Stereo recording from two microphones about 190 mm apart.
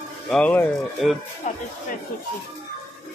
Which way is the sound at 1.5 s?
40° left (ahead or behind).